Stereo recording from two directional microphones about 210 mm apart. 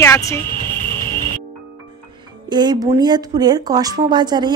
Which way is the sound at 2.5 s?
20° right (ahead or behind).